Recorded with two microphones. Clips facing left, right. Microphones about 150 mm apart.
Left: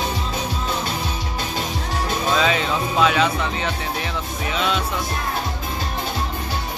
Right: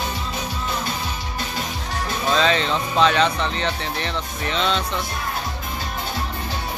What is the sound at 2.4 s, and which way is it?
Speech, 5° left (ahead or behind).